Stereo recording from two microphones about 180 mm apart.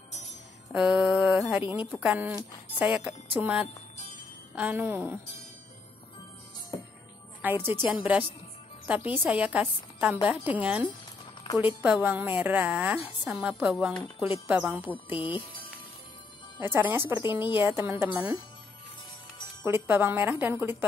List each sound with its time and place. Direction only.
0.7 s a woman's voice: centre (ahead or behind)
7.4 s a woman's voice: 10° right (ahead or behind)
11.4 s a woman's voice: 25° left (ahead or behind)
11.8 s a woman's voice: 10° right (ahead or behind)
15.1 s speech: 30° left (ahead or behind)
16.5 s a woman's voice: 10° right (ahead or behind)
19.6 s a woman's voice: 10° right (ahead or behind)